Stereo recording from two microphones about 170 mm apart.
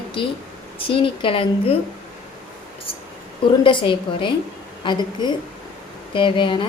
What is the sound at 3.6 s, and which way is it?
Speech, 30° left (ahead or behind).